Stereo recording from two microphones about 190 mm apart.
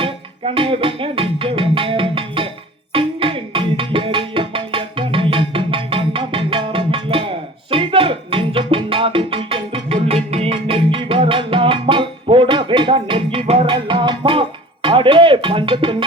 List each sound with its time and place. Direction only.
0.0 s music: 30° right (ahead or behind)
2.9 s tabla: 25° right (ahead or behind)
10.3 s music: 30° right (ahead or behind)